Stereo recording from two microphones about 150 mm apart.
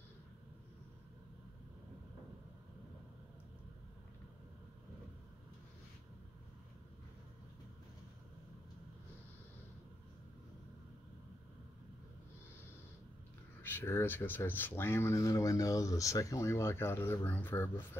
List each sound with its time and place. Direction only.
13.6 s speech: 15° left (ahead or behind)